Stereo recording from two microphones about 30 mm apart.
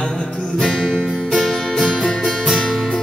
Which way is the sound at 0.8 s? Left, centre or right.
Centre.